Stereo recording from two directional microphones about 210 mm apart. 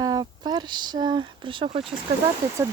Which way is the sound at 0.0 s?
20° right (ahead or behind).